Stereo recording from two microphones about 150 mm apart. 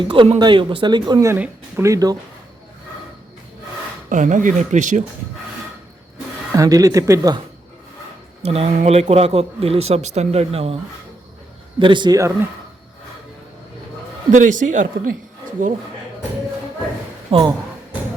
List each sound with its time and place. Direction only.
0.0 s speech: 35° right (ahead or behind)
1.3 s speech: 15° right (ahead or behind)
4.1 s speech: 55° right (ahead or behind)
6.5 s speech: 25° right (ahead or behind)
8.4 s speech: 45° right (ahead or behind)
11.8 s speech: 30° right (ahead or behind)
14.3 s speech: 60° right (ahead or behind)
17.3 s speech: 40° right (ahead or behind)